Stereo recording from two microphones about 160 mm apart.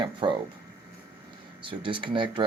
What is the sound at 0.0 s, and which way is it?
Speech, 30° right (ahead or behind).